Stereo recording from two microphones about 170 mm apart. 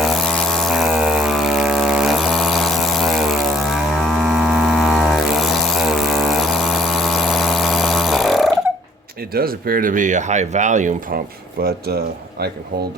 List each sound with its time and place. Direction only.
0.0 s a sound: centre (ahead or behind)
9.3 s speech: 60° right (ahead or behind)
11.6 s speech: 70° right (ahead or behind)